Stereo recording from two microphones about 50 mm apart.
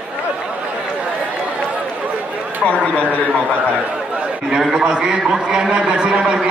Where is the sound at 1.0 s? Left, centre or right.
Right.